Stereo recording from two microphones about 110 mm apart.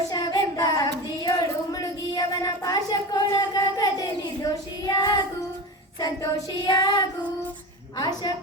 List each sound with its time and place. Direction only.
0.1 s child singing: 35° left (ahead or behind)
1.3 s a sound: 35° left (ahead or behind)
6.0 s child singing: 35° left (ahead or behind)